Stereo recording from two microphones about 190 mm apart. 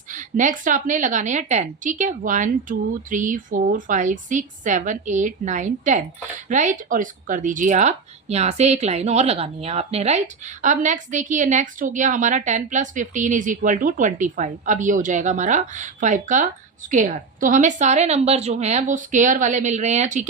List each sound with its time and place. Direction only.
0.1 s speech: 40° right (ahead or behind)